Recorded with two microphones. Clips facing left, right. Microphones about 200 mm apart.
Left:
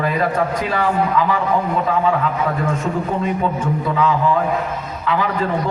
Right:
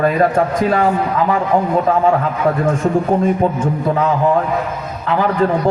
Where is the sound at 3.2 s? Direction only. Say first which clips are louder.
Right 5 dB; 50° right (ahead or behind).